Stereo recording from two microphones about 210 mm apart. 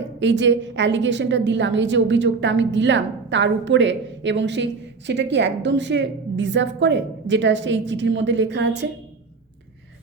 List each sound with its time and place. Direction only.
0.2 s a woman's voice: 60° right (ahead or behind)